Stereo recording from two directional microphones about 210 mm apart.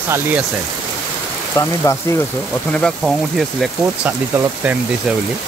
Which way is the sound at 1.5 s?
15° left (ahead or behind).